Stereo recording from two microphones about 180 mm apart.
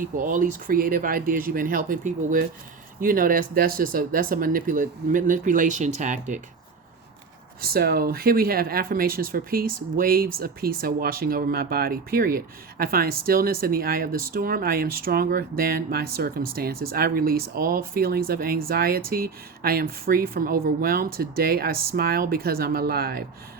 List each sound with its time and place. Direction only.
0.0 s speech: 45° right (ahead or behind)
7.6 s speech: 60° right (ahead or behind)